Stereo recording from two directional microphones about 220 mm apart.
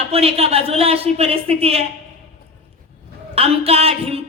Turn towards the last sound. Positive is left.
turn(degrees=-25)  # may be behind; listen again after turning